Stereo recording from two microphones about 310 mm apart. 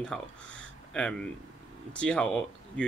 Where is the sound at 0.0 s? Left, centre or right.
Centre.